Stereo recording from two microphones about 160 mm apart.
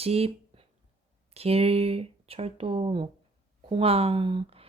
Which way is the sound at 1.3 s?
40° right (ahead or behind).